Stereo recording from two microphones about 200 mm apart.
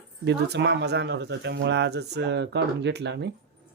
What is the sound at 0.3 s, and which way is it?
Speech, 60° right (ahead or behind).